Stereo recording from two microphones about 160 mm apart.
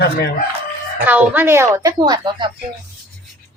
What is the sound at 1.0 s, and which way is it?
Speech, 10° right (ahead or behind).